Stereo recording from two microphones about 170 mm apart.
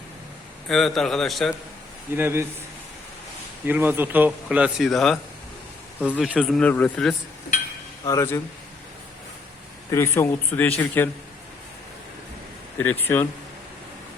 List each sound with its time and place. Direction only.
0.7 s speech: centre (ahead or behind)
2.1 s speech: 15° right (ahead or behind)
3.7 s speech: 10° right (ahead or behind); by 7.2 s 5° left (ahead or behind)
8.0 s speech: 15° left (ahead or behind)
9.9 s speech: 15° left (ahead or behind)
12.7 s speech: 10° left (ahead or behind)